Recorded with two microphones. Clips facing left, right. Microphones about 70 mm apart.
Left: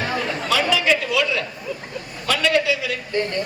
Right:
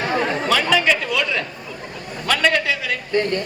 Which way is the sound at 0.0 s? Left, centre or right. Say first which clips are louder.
Right 4 dB; right.